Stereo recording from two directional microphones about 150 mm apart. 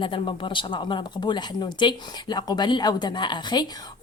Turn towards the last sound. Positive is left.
turn(degrees=30)  # may be behind; listen again after turning